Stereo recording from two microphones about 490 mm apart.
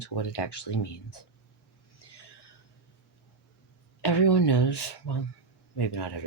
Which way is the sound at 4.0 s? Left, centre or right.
Left.